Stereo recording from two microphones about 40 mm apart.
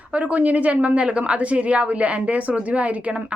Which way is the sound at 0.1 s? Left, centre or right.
Right.